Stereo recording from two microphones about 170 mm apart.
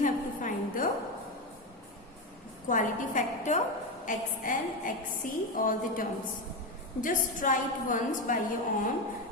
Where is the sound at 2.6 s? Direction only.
50° left (ahead or behind).